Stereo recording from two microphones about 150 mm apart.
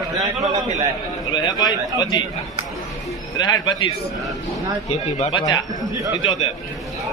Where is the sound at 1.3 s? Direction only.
25° left (ahead or behind).